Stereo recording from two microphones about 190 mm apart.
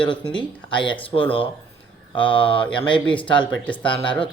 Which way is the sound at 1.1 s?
25° left (ahead or behind).